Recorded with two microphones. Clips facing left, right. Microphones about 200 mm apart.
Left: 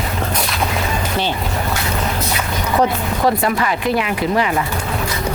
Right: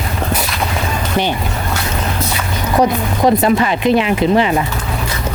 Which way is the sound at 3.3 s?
25° right (ahead or behind).